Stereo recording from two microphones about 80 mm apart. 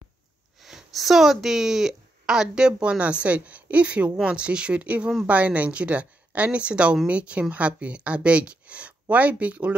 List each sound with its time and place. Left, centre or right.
0.6 s speech: centre